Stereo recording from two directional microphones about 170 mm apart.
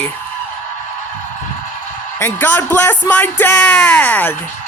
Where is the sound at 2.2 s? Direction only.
15° left (ahead or behind).